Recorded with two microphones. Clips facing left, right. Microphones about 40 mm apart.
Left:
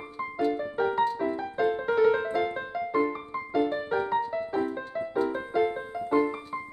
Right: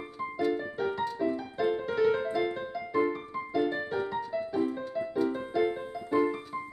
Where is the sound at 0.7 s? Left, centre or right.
Left.